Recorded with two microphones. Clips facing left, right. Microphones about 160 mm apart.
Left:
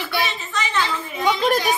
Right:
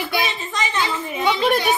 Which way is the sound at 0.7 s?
20° right (ahead or behind).